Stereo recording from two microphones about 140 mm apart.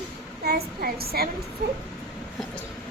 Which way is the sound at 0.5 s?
90° right.